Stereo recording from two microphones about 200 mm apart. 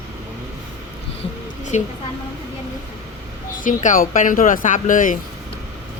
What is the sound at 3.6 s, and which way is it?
Speech, 40° left (ahead or behind).